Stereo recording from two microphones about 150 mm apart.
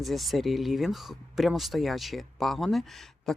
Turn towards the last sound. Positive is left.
turn(degrees=0)  # may be behind; listen again after turning